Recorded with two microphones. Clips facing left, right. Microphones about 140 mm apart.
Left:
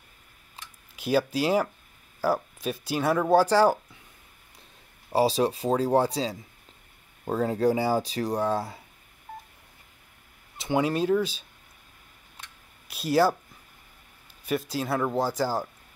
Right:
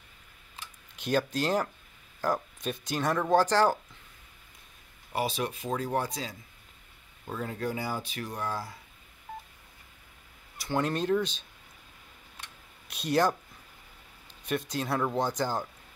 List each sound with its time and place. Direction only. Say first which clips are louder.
0.9 s speech: left 4 dB; 5° left (ahead or behind)
5.1 s speech: left 8 dB; 35° left (ahead or behind)
10.8 s speech: left 3 dB; 5° left (ahead or behind)
12.8 s speech: left 4 dB; 5° left (ahead or behind)
14.4 s speech: left 3 dB; 5° left (ahead or behind)